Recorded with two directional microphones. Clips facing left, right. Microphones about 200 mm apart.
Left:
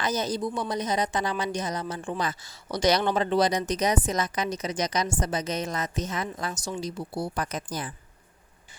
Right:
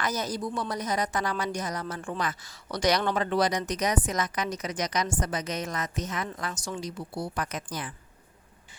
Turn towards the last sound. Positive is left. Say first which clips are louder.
# left 2 dB
turn(degrees=35)  # may be behind; listen again after turning